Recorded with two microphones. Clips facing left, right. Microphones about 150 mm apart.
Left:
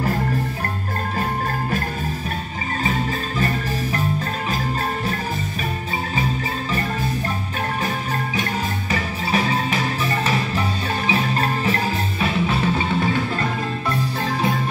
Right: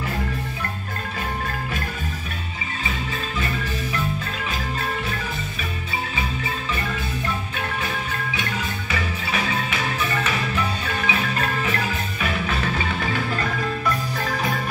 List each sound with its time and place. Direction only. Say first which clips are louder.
2.8 s music: left 6 dB; 40° left (ahead or behind)
7.8 s music: left 4 dB; 35° left (ahead or behind)